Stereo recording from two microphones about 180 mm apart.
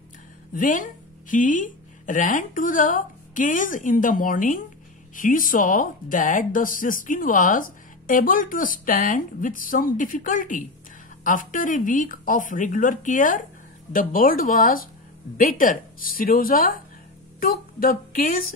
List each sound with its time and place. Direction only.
0.6 s speech: 45° left (ahead or behind)